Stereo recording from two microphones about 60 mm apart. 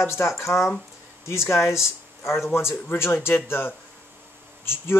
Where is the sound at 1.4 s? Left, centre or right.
Left.